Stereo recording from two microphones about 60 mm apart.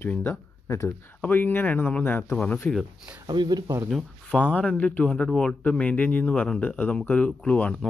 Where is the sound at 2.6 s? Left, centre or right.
Centre.